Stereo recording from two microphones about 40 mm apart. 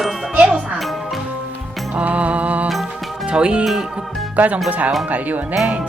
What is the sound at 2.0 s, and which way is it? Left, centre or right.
Music, right.